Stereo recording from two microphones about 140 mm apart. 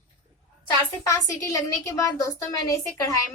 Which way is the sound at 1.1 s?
25° left (ahead or behind).